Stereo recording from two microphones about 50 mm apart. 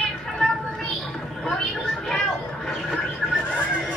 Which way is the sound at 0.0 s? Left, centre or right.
Centre.